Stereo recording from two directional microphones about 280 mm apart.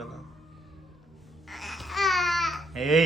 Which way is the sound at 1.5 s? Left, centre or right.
Centre.